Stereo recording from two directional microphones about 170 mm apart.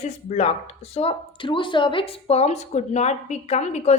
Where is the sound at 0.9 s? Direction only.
35° left (ahead or behind).